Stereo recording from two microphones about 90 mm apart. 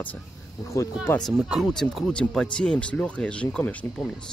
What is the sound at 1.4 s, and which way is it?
Speech, 10° right (ahead or behind).